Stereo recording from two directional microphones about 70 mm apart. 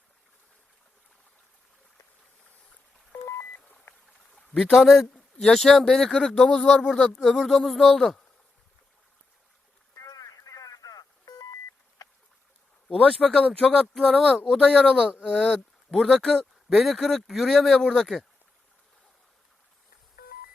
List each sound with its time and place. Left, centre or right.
4.4 s a man's voice: centre
9.9 s telephone dialing: left
12.9 s speech: centre